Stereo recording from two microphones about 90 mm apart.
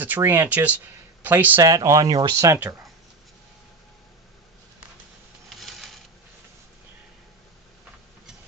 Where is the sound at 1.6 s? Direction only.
40° right (ahead or behind).